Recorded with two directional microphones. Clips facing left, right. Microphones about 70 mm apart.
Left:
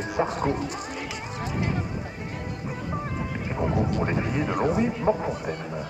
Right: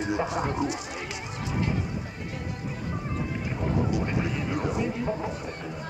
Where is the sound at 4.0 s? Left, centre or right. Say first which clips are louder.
Left 3 dB; left.